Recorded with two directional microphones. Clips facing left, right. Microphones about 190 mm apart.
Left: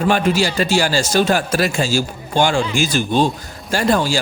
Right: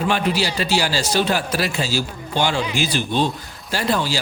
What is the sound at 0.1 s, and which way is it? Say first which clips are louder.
A man's voice: left 6 dB; 45° left (ahead or behind).